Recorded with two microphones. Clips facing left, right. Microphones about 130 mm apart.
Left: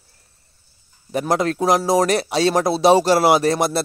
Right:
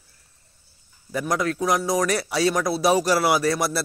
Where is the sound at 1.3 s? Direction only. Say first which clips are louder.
Left 5 dB; 25° left (ahead or behind).